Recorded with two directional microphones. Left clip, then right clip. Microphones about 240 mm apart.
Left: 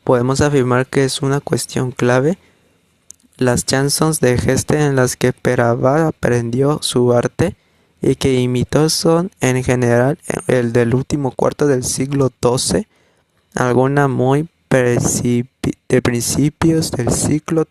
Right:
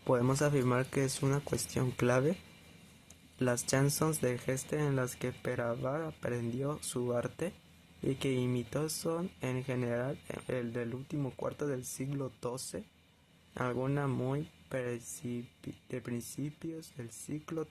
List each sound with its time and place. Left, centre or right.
0.0 s speech: left